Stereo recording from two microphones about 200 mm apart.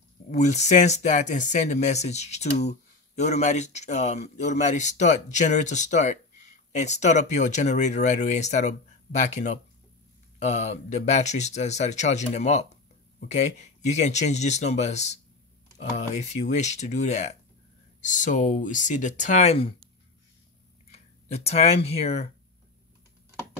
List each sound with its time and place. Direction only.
0.3 s speech: 35° left (ahead or behind)
20.9 s speech: 30° left (ahead or behind)